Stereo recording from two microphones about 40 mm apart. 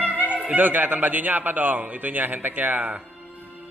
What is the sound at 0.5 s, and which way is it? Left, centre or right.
A man's voice, right.